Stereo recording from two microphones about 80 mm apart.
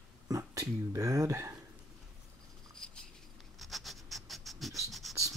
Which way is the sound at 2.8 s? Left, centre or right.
Centre.